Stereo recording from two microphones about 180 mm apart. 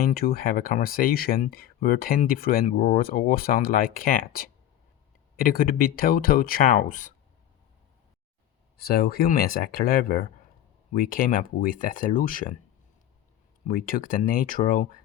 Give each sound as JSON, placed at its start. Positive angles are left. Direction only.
{"t": 0.0, "sound": "speech", "side_deg": 55}
{"t": 8.8, "sound": "speech", "side_deg": 60}
{"t": 13.7, "sound": "speech", "side_deg": 50}